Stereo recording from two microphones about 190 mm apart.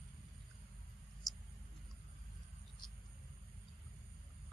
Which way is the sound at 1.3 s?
Centre (ahead or behind).